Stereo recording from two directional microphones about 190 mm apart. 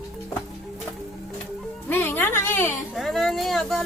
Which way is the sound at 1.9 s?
10° left (ahead or behind).